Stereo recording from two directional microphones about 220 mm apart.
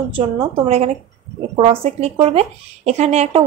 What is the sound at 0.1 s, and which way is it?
A woman's voice, 25° right (ahead or behind).